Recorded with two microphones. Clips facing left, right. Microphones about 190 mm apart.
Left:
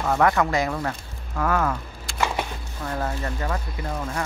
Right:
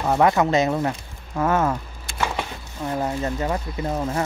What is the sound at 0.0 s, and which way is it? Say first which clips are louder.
Speech: right 2 dB; 20° right (ahead or behind).